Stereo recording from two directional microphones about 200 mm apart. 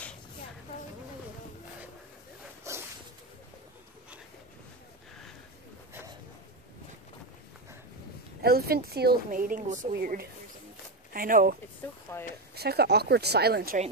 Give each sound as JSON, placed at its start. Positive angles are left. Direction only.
{"t": 2.7, "sound": "a sound", "side_deg": -15}
{"t": 8.4, "sound": "speech", "side_deg": -50}
{"t": 9.9, "sound": "speech", "side_deg": -50}
{"t": 12.1, "sound": "speech", "side_deg": 15}
{"t": 12.5, "sound": "speech", "side_deg": -55}